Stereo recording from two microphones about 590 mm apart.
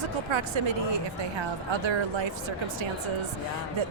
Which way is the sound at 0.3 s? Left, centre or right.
Right.